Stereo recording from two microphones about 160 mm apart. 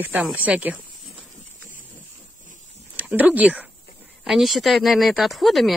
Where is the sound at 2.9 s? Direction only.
10° right (ahead or behind).